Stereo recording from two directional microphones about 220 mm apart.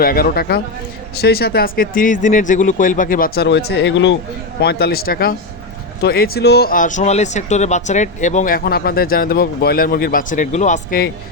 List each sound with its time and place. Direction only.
0.0 s a man's voice: 45° left (ahead or behind)